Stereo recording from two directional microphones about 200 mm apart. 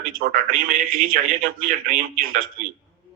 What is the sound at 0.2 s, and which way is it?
Speech, 45° right (ahead or behind).